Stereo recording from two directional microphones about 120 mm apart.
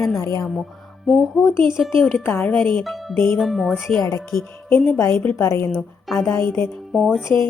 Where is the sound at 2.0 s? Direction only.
10° left (ahead or behind).